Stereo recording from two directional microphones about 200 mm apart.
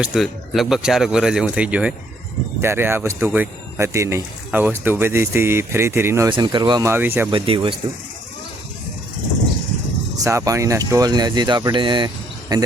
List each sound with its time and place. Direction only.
0.0 s speech: centre (ahead or behind)
7.3 s speech: 25° right (ahead or behind)
10.2 s speech: 15° right (ahead or behind)